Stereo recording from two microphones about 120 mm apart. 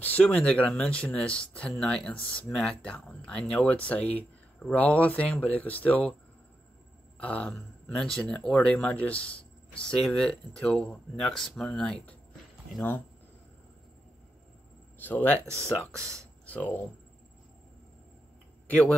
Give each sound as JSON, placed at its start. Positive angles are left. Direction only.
{"t": 0.0, "sound": "speech", "side_deg": 10}
{"t": 7.2, "sound": "speech", "side_deg": 10}
{"t": 15.0, "sound": "speech", "side_deg": 15}
{"t": 15.4, "sound": "speech", "side_deg": -25}
{"t": 16.4, "sound": "speech", "side_deg": 15}
{"t": 18.7, "sound": "speech", "side_deg": 10}